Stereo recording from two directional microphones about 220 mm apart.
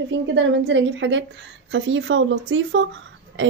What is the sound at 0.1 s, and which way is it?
Speech, 55° right (ahead or behind).